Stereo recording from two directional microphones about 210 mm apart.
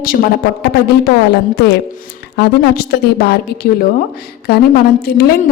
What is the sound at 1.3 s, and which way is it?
A woman's voice, 50° left (ahead or behind).